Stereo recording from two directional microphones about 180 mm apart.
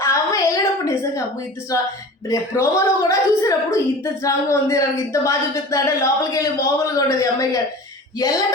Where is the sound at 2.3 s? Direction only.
15° left (ahead or behind).